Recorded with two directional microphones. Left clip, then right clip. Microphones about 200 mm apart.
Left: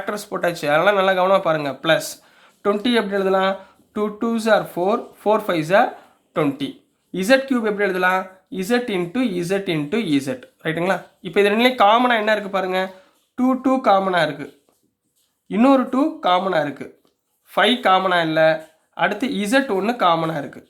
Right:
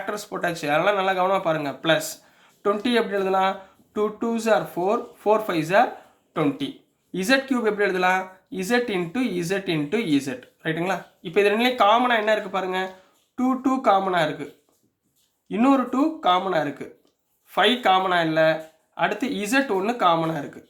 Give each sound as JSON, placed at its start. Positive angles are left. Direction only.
{"t": 0.0, "sound": "speech", "side_deg": 25}